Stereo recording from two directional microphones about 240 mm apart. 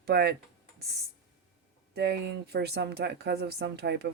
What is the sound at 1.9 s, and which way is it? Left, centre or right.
Speech, right.